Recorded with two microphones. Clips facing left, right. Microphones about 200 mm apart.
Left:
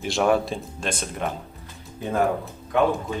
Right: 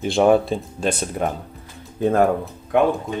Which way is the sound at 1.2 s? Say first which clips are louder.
Right 5 dB; 40° right (ahead or behind).